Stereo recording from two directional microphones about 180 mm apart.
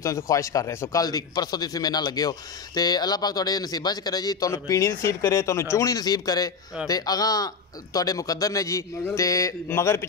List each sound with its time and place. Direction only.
0.0 s a man's voice: 15° left (ahead or behind)